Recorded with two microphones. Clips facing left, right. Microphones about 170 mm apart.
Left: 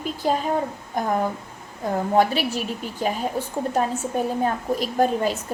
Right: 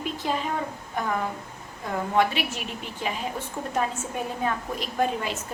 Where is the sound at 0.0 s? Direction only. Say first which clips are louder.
Left 5 dB; 40° left (ahead or behind).